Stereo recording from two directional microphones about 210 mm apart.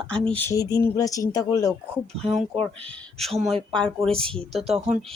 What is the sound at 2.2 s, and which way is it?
Speech, 30° right (ahead or behind).